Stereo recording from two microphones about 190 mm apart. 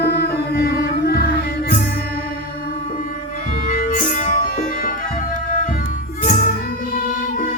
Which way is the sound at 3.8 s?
40° left (ahead or behind).